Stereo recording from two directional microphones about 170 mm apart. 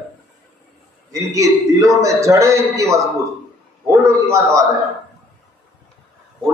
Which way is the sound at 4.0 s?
15° right (ahead or behind).